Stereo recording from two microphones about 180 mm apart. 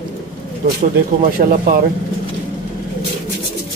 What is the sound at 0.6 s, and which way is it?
Speech, 60° right (ahead or behind).